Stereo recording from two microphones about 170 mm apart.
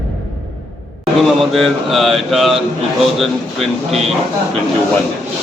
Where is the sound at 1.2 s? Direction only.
Centre (ahead or behind).